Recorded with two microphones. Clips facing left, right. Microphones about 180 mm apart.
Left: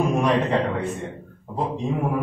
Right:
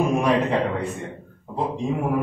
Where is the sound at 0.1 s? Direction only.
Centre (ahead or behind).